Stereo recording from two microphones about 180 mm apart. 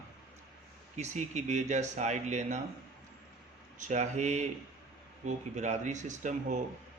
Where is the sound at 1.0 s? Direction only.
40° right (ahead or behind).